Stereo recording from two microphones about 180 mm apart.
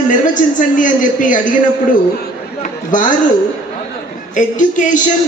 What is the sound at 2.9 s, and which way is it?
Speech, 45° left (ahead or behind).